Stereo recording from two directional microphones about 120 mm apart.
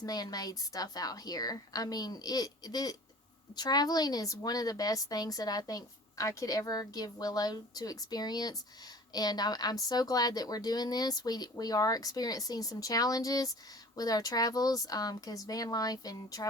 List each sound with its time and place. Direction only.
0.0 s a woman's voice: 35° left (ahead or behind)